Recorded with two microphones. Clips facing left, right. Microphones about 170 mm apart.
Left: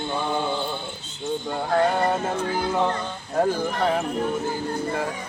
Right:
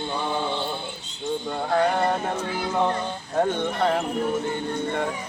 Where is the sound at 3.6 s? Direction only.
Centre (ahead or behind).